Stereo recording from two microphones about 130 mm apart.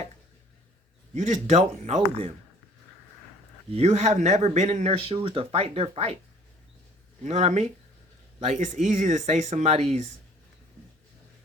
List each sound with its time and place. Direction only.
1.1 s speech: 60° right (ahead or behind)
3.7 s speech: 55° right (ahead or behind)
7.3 s speech: 60° right (ahead or behind)